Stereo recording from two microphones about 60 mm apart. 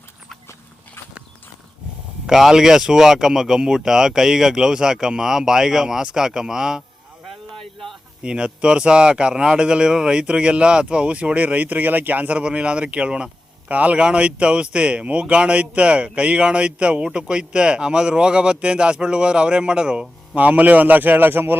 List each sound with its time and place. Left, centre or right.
2.2 s speech: centre
7.3 s a sound: centre
8.2 s speech: centre
20.4 s a man's voice: right